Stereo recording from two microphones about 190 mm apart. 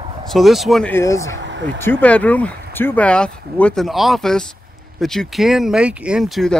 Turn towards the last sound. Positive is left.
turn(degrees=0)  # may be behind; listen again after turning